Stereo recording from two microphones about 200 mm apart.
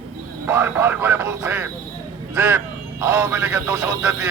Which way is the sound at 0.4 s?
10° right (ahead or behind).